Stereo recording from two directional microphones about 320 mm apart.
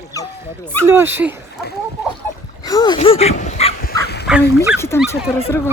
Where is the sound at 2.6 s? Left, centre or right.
Centre.